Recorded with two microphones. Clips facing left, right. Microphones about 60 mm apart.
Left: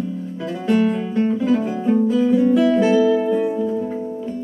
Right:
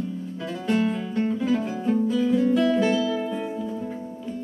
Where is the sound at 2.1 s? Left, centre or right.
Centre.